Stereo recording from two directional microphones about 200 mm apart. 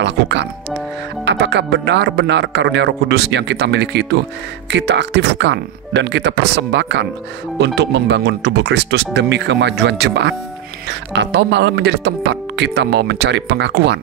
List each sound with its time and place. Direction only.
0.0 s speech: 60° right (ahead or behind)